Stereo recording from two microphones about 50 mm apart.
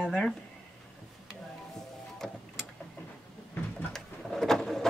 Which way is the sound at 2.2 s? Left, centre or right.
Centre.